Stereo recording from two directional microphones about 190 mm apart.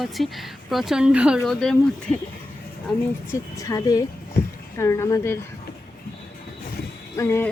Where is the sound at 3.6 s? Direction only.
15° left (ahead or behind).